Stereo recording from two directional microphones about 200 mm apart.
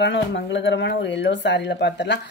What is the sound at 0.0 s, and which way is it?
A woman's voice, 60° left (ahead or behind).